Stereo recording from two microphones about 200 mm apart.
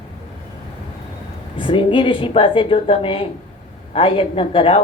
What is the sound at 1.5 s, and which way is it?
Speech, 25° left (ahead or behind).